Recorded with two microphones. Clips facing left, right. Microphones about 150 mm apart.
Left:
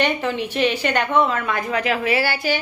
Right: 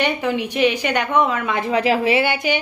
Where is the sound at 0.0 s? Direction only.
15° right (ahead or behind).